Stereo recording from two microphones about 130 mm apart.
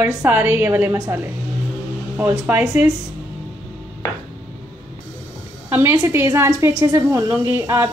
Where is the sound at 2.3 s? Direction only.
15° right (ahead or behind).